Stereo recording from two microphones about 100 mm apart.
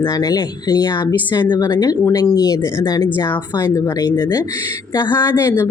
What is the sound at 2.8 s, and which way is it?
Speech, 45° left (ahead or behind).